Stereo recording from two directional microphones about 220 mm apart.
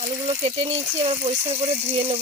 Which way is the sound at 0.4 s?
25° right (ahead or behind).